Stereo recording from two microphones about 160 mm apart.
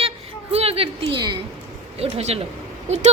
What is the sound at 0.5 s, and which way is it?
Speech, 40° right (ahead or behind).